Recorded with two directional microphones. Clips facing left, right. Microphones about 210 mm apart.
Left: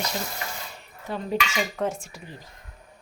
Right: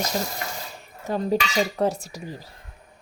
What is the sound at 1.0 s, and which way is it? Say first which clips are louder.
Cutlery: right 4 dB; 40° right (ahead or behind).